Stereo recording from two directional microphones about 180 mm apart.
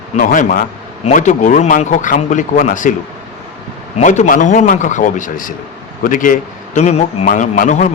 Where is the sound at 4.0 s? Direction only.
45° left (ahead or behind).